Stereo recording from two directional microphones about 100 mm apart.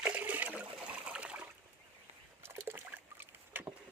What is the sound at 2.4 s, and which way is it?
Rowboat, 20° right (ahead or behind).